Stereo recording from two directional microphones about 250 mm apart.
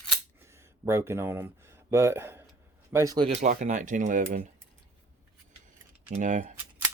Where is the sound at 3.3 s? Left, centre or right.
Right.